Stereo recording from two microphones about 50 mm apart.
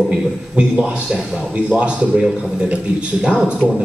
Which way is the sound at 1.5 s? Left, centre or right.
Right.